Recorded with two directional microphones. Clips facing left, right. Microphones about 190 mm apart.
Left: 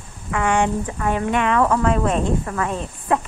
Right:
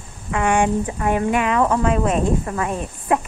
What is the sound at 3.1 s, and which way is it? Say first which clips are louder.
Speech: right 1 dB; 15° right (ahead or behind).